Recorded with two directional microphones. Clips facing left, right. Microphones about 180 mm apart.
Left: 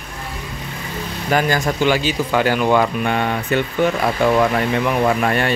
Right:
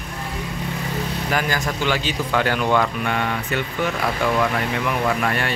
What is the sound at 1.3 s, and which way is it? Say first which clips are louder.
Speech: left 7 dB; 30° left (ahead or behind).